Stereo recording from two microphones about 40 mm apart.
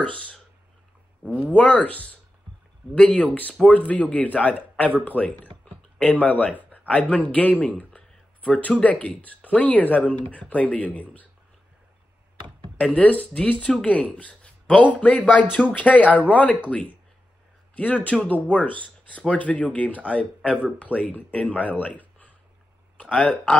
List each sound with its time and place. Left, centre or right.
0.0 s speech: left
1.5 s speech: left
3.2 s speech: left
6.9 s speech: left
7.2 s speech: left
12.7 s speech: left
23.2 s speech: left